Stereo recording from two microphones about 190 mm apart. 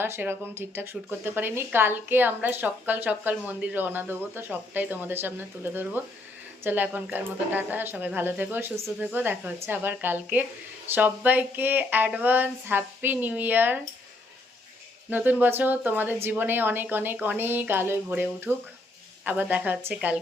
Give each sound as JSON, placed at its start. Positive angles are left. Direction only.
{"t": 0.0, "sound": "a woman's voice", "side_deg": -10}
{"t": 15.1, "sound": "a woman's voice", "side_deg": -10}